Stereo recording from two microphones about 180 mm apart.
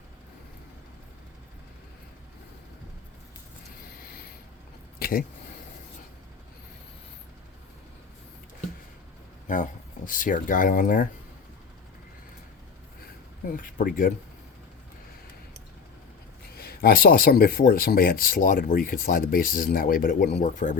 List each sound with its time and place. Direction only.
4.9 s a sound: 55° left (ahead or behind)
9.5 s speech: 45° left (ahead or behind)
13.5 s speech: 50° left (ahead or behind)
16.6 s speech: 55° left (ahead or behind)
20.4 s speech: 45° left (ahead or behind)